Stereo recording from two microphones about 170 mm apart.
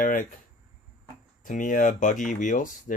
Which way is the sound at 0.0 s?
50° left (ahead or behind).